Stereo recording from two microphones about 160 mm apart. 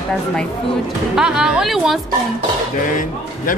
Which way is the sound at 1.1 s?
5° right (ahead or behind).